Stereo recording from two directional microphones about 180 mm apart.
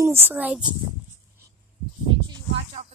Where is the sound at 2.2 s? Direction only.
35° right (ahead or behind).